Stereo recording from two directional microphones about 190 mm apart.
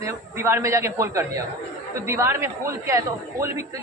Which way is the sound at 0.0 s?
15° right (ahead or behind).